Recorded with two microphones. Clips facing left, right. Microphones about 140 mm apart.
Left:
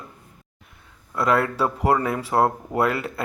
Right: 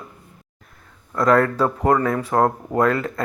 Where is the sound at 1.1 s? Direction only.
5° left (ahead or behind).